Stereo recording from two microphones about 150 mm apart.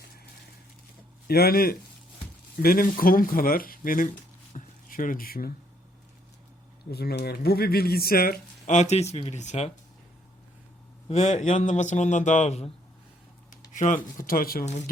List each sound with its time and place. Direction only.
1.3 s a man's voice: 90° left; by 4.1 s 70° left (ahead or behind)
4.5 s a sound: 65° left (ahead or behind)
6.9 s speech: 90° left; by 9.7 s 50° left (ahead or behind)
11.1 s a man's voice: 55° left (ahead or behind)
13.7 s speech: 60° left (ahead or behind); by 14.6 s 75° left (ahead or behind)
14.6 s a man's voice: 50° left (ahead or behind)